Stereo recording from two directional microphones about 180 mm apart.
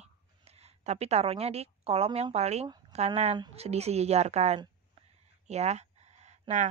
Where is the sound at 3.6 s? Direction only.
35° right (ahead or behind).